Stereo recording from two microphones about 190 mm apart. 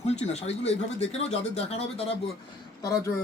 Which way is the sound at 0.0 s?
35° left (ahead or behind).